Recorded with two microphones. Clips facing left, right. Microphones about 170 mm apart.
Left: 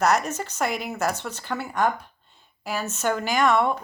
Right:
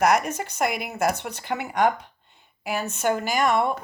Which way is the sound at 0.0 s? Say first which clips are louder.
Right 1 dB; 15° right (ahead or behind).